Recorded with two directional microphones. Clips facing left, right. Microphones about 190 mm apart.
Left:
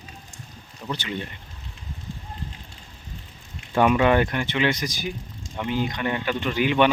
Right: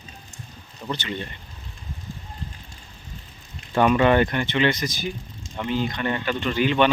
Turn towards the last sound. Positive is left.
turn(degrees=15)  # may be behind; listen again after turning